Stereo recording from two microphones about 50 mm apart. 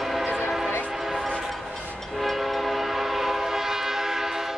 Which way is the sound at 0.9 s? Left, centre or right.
Centre.